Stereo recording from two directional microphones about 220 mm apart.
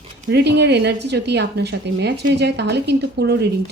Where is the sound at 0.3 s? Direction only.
50° right (ahead or behind).